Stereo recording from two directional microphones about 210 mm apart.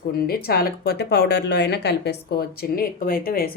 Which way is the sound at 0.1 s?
45° left (ahead or behind).